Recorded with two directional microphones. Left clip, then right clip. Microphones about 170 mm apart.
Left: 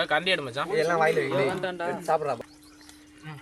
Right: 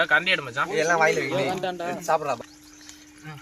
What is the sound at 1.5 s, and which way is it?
Speech, 35° right (ahead or behind).